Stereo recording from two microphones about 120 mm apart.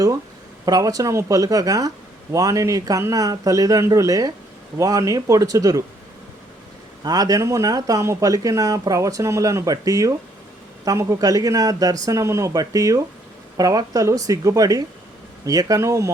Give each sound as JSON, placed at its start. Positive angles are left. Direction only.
{"t": 0.6, "sound": "speech", "side_deg": -30}
{"t": 7.0, "sound": "speech", "side_deg": -30}